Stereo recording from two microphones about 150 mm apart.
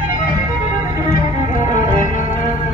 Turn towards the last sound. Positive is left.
turn(degrees=-25)  # may be behind; listen again after turning